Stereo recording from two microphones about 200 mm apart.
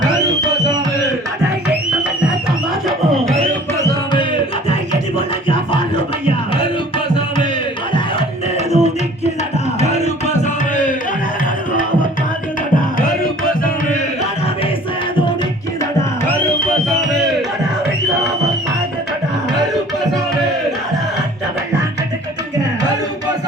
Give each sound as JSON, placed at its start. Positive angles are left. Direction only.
{"t": 5.1, "sound": "music", "side_deg": 25}
{"t": 8.5, "sound": "tabla", "side_deg": 30}
{"t": 9.8, "sound": "music", "side_deg": 30}